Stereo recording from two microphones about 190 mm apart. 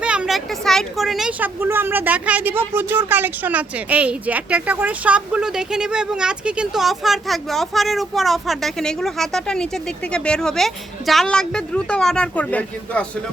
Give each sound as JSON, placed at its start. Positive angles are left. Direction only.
{"t": 0.0, "sound": "speech", "side_deg": -5}